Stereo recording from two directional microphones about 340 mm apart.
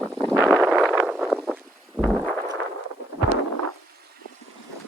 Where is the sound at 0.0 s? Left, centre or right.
Centre.